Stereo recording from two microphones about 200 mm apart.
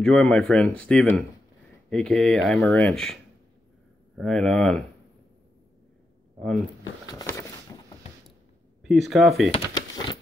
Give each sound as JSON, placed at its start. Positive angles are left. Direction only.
{"t": 0.0, "sound": "speech", "side_deg": 5}
{"t": 4.2, "sound": "speech", "side_deg": 0}
{"t": 7.1, "sound": "a sound", "side_deg": 15}
{"t": 8.8, "sound": "speech", "side_deg": 0}
{"t": 9.5, "sound": "shuffling cards", "side_deg": 20}